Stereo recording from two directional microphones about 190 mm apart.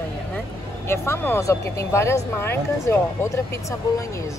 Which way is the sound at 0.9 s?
10° left (ahead or behind).